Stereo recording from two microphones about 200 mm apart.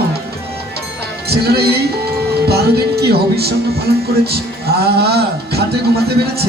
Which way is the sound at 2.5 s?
55° right (ahead or behind).